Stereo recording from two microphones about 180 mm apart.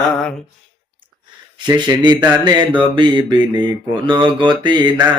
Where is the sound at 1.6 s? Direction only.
20° right (ahead or behind).